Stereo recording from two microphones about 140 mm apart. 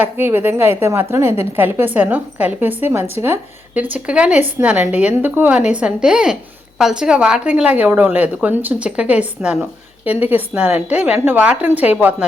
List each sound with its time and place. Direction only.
0.0 s a woman's voice: 15° right (ahead or behind)